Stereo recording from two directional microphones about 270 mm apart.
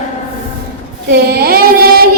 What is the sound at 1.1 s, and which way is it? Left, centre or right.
Child singing, right.